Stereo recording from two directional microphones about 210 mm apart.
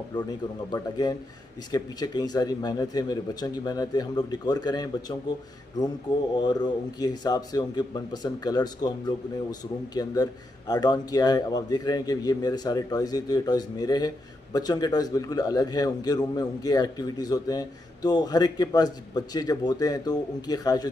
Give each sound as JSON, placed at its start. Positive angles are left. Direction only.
{"t": 0.7, "sound": "a man's voice", "side_deg": 20}
{"t": 6.3, "sound": "a man's voice", "side_deg": 20}